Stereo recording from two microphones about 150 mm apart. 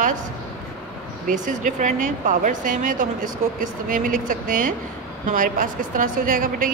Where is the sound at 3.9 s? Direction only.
65° right (ahead or behind).